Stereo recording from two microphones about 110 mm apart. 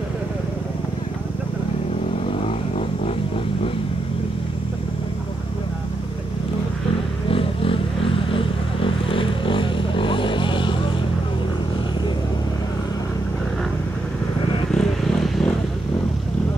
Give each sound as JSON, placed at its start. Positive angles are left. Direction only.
{"t": 7.2, "sound": "vehicle", "side_deg": 55}
{"t": 14.7, "sound": "vehicle", "side_deg": 5}